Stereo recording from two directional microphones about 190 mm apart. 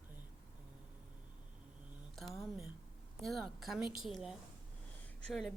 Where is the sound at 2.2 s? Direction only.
Centre (ahead or behind).